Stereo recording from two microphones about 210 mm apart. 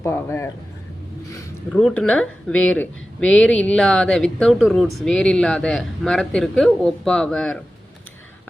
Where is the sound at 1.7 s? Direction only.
5° left (ahead or behind).